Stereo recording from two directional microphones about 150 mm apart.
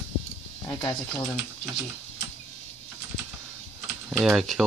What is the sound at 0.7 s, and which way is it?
Speech, 25° left (ahead or behind).